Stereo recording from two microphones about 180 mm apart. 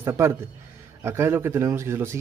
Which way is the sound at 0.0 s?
15° right (ahead or behind).